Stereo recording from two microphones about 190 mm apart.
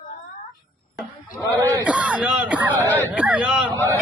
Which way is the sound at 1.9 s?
5° right (ahead or behind).